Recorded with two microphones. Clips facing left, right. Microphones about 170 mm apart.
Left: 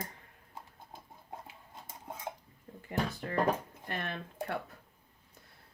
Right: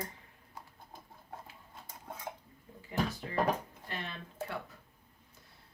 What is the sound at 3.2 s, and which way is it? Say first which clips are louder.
Speech: left 5 dB; 55° left (ahead or behind).